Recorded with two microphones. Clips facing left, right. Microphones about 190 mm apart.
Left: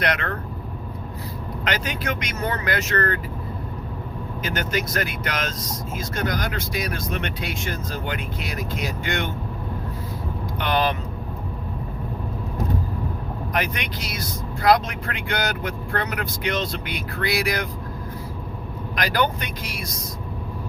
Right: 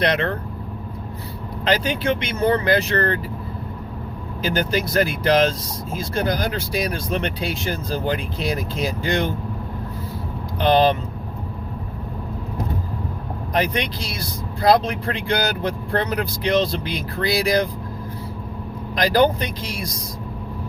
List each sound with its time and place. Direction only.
0.0 s speech: 30° right (ahead or behind)
1.6 s speech: 30° right (ahead or behind)
4.4 s speech: 30° right (ahead or behind)
10.6 s speech: 30° right (ahead or behind)
13.5 s speech: 35° right (ahead or behind)
18.9 s speech: 30° right (ahead or behind)